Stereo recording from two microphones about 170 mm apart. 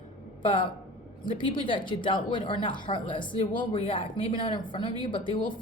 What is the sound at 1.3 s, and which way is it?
A woman's voice, 30° left (ahead or behind).